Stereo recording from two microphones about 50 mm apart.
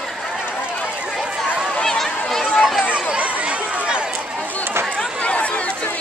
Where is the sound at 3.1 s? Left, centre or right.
Right.